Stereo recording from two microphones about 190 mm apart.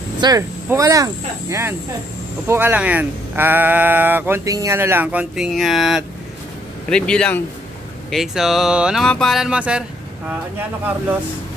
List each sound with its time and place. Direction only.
0.2 s speech: 15° right (ahead or behind)